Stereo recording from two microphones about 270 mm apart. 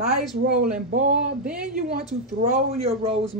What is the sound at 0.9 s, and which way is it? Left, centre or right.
Speech, right.